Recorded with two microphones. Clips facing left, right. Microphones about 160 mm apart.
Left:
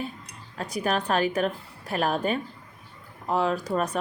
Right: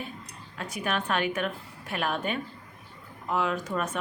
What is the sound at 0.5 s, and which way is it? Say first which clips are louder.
Speech: left 4 dB; 35° left (ahead or behind).